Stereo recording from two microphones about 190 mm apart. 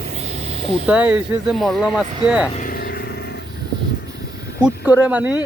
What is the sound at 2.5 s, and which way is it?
Vehicle, 50° left (ahead or behind).